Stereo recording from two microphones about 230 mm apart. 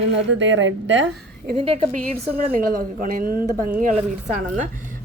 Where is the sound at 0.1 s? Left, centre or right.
Right.